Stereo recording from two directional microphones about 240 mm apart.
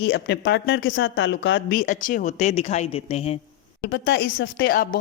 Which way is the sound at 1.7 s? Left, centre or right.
Left.